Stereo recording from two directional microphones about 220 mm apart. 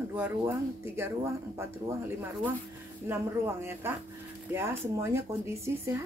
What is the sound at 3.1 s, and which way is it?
A woman's voice, 10° right (ahead or behind).